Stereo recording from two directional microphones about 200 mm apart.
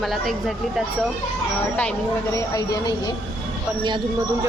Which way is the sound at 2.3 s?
15° left (ahead or behind).